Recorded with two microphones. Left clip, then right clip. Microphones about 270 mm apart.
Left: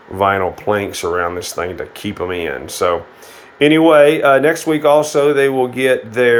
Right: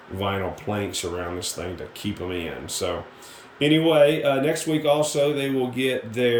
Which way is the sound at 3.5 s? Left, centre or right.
Left.